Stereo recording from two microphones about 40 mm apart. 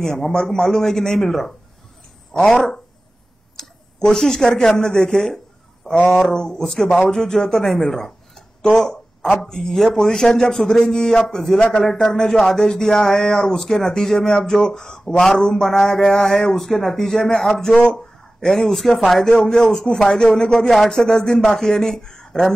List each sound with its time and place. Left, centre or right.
0.0 s speech: centre
3.5 s a man's voice: centre
20.1 s speech: left